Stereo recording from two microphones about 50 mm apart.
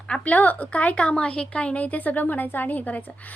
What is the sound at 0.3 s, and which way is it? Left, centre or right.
A woman's voice, left.